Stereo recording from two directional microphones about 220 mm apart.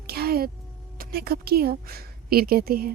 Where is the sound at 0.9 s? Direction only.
45° right (ahead or behind).